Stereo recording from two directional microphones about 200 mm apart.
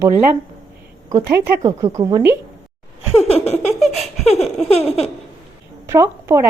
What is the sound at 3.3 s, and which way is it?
Laughter, 30° left (ahead or behind).